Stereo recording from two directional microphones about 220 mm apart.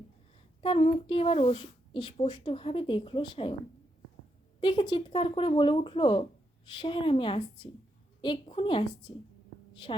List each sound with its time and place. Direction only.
0.6 s speech: 25° left (ahead or behind)
4.6 s speech: 20° left (ahead or behind)